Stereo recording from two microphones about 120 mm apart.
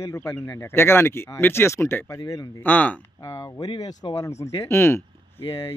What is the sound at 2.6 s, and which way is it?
Speech, 15° left (ahead or behind).